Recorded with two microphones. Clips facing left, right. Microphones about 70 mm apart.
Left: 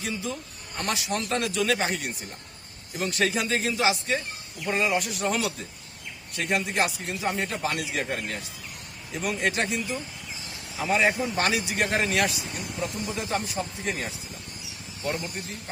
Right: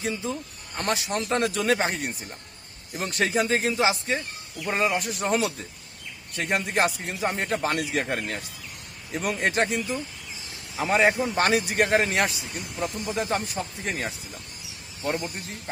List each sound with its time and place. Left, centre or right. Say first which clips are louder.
0.0 s speech: right 2 dB; right
13.1 s speech: right 2 dB; right